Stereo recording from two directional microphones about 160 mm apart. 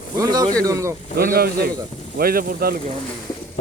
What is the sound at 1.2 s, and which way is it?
Speech, 70° right (ahead or behind).